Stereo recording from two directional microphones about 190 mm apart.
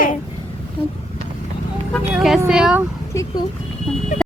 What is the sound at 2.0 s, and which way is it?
Speech, 5° right (ahead or behind).